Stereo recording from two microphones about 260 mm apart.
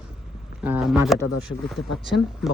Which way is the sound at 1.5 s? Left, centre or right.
Left.